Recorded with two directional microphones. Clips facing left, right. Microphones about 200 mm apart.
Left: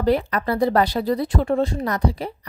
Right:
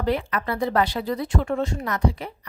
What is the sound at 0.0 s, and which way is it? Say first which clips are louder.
Speech: left 5 dB; 40° left (ahead or behind).